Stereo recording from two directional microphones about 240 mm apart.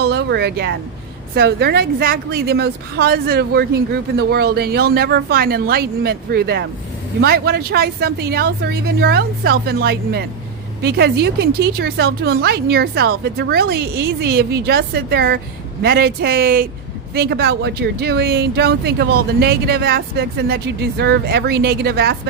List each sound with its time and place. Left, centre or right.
0.0 s speech: right